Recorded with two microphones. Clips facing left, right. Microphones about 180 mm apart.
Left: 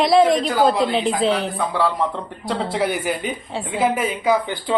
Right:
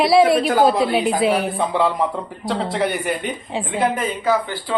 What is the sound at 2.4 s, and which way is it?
A man's voice, centre (ahead or behind).